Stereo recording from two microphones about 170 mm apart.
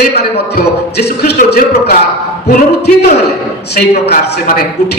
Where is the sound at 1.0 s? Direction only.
70° left (ahead or behind).